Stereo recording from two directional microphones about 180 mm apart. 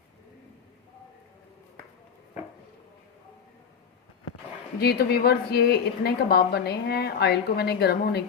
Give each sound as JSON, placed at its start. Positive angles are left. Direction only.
{"t": 4.8, "sound": "a woman's voice", "side_deg": 60}